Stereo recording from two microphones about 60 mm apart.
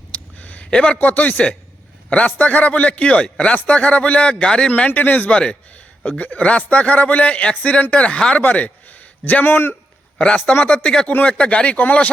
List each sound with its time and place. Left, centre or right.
0.1 s a sound: left
0.7 s a man's voice: centre
0.9 s a man's voice: left
4.7 s a man's voice: left
10.2 s a man's voice: centre